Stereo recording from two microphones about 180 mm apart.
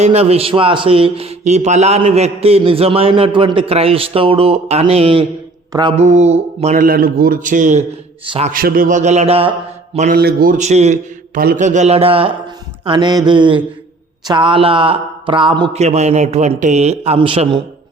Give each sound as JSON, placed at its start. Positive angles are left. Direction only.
{"t": 0.0, "sound": "a man's voice", "side_deg": -35}
{"t": 6.7, "sound": "a man's voice", "side_deg": -55}
{"t": 8.2, "sound": "speech", "side_deg": -30}
{"t": 8.4, "sound": "a man's voice", "side_deg": -55}
{"t": 10.1, "sound": "a man's voice", "side_deg": -60}
{"t": 11.3, "sound": "a man's voice", "side_deg": -50}
{"t": 15.8, "sound": "a man's voice", "side_deg": -35}